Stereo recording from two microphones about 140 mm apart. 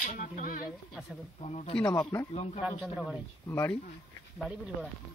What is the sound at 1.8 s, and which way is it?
Speech, 25° left (ahead or behind).